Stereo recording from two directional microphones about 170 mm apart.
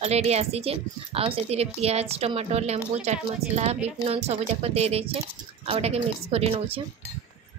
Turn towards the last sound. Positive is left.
turn(degrees=-35)  # may be behind; listen again after turning